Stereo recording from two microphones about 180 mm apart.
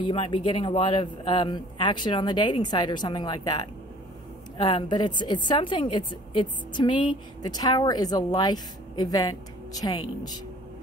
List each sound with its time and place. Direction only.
0.0 s a woman's voice: 30° left (ahead or behind)